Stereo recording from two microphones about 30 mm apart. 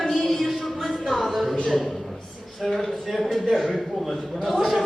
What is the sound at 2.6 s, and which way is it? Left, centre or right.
Speech, centre.